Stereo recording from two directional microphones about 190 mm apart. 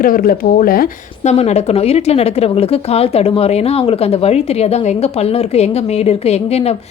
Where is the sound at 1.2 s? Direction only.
35° left (ahead or behind).